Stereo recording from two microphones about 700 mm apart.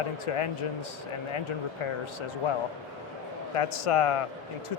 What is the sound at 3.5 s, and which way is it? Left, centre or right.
Speech, left.